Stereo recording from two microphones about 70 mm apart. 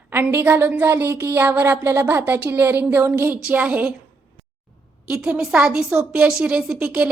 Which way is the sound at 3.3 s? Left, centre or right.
Right.